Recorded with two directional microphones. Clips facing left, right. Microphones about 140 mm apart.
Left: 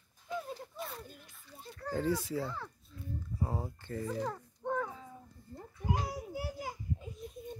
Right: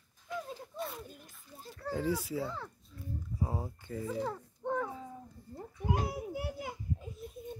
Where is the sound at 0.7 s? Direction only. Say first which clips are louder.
Right 7 dB; centre (ahead or behind).